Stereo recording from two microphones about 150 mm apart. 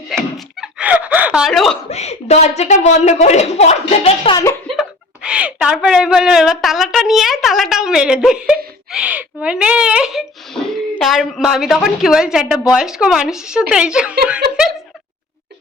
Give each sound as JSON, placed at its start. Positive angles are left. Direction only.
{"t": 0.3, "sound": "a sound", "side_deg": -5}
{"t": 1.9, "sound": "a woman's voice", "side_deg": 45}
{"t": 4.8, "sound": "a woman's voice", "side_deg": -5}